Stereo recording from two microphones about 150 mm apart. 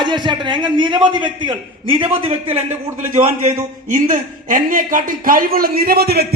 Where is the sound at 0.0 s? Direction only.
30° right (ahead or behind).